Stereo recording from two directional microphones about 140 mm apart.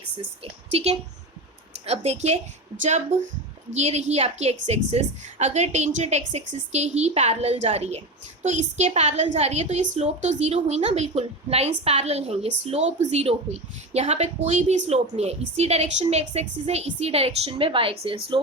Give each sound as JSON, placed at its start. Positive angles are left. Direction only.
{"t": 0.7, "sound": "a woman's voice", "side_deg": -50}